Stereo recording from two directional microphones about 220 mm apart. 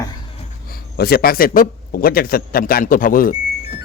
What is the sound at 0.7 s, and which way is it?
Speech, 45° left (ahead or behind).